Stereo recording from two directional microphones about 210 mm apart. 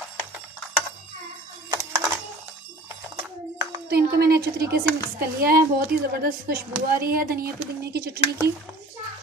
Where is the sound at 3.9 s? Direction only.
50° right (ahead or behind).